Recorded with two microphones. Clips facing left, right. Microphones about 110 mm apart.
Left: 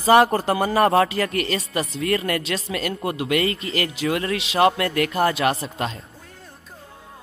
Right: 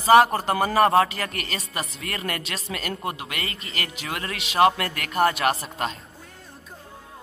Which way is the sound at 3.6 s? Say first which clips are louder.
Left 8 dB; 35° left (ahead or behind).